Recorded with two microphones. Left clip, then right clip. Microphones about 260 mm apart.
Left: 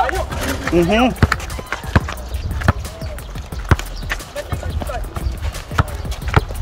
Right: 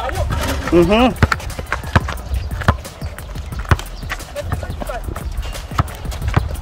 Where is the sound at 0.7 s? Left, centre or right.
Centre.